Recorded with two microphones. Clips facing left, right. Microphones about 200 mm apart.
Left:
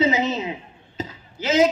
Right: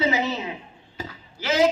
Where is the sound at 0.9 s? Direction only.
20° left (ahead or behind).